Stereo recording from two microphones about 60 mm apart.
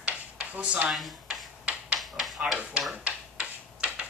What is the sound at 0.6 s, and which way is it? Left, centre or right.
Speech, right.